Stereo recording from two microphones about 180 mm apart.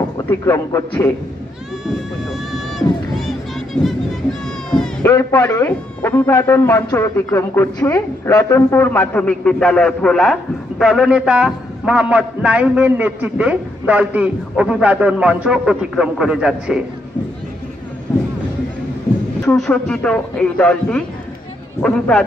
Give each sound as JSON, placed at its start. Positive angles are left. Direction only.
{"t": 0.3, "sound": "a man's voice", "side_deg": 15}
{"t": 3.2, "sound": "music", "side_deg": 0}
{"t": 5.0, "sound": "a man's voice", "side_deg": 15}
{"t": 19.4, "sound": "a man's voice", "side_deg": 5}